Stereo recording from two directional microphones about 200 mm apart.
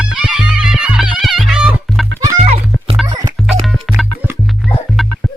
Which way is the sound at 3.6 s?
Centre (ahead or behind).